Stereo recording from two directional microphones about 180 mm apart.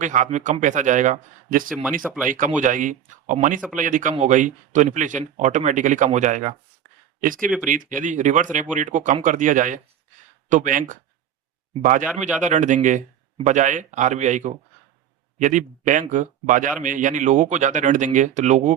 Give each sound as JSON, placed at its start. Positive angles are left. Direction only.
{"t": 0.0, "sound": "a man's voice", "side_deg": -45}
{"t": 1.8, "sound": "speech", "side_deg": -10}
{"t": 2.6, "sound": "a man's voice", "side_deg": -45}
{"t": 7.7, "sound": "a man's voice", "side_deg": -45}